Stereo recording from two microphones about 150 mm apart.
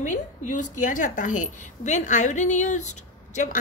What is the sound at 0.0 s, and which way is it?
A woman's voice, 60° left (ahead or behind).